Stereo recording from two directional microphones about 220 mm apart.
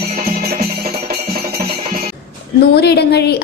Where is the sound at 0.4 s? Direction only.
45° right (ahead or behind).